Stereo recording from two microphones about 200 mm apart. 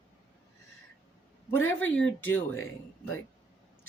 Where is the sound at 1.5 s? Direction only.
90° left.